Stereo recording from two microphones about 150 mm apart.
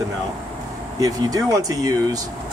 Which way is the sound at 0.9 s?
25° right (ahead or behind).